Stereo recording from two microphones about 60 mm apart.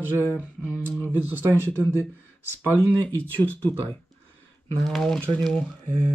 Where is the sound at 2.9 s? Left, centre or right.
Left.